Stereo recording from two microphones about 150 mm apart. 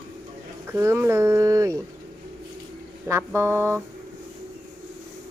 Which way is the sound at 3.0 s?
15° right (ahead or behind).